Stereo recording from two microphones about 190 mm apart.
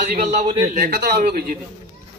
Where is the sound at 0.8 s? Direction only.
50° right (ahead or behind).